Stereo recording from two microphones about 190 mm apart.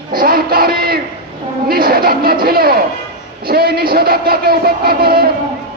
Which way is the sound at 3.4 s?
55° right (ahead or behind).